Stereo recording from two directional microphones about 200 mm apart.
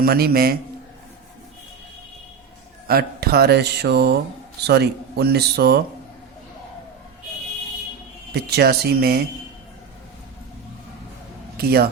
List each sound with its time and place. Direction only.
0.0 s speech: 50° right (ahead or behind)
2.8 s speech: 50° right (ahead or behind)
8.3 s speech: 55° right (ahead or behind)
11.5 s a man's voice: 50° right (ahead or behind)